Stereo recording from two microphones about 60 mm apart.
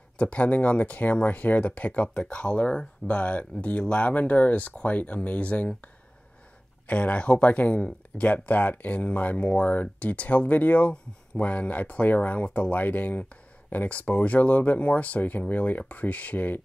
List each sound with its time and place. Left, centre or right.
0.2 s speech: left
6.9 s speech: left